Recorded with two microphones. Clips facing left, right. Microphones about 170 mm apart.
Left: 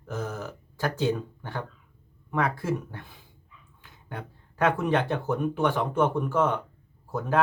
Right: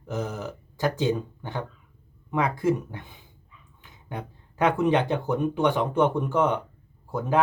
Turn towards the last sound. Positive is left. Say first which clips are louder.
# right 2 dB
turn(degrees=-15)  # may be behind; listen again after turning